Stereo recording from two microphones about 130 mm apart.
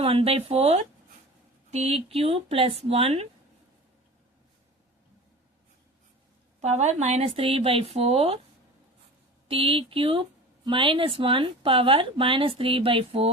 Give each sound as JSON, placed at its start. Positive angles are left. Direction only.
{"t": 0.0, "sound": "a woman's voice", "side_deg": -45}
{"t": 6.6, "sound": "a woman's voice", "side_deg": -60}
{"t": 9.5, "sound": "a woman's voice", "side_deg": -45}